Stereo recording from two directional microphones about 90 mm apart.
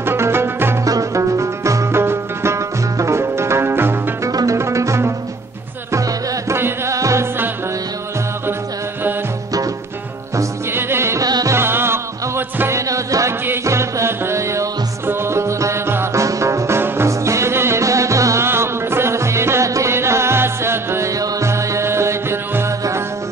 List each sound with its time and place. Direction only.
0.0 s music: 25° right (ahead or behind)
0.8 s music: 40° right (ahead or behind)
4.3 s music: 45° right (ahead or behind)
4.6 s music: 35° right (ahead or behind)
6.5 s music: 30° right (ahead or behind)
10.3 s music: 25° right (ahead or behind)
11.2 s music: 45° right (ahead or behind)
11.5 s music: 25° right (ahead or behind)